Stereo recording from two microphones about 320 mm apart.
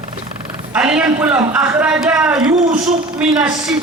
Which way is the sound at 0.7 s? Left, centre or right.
Centre.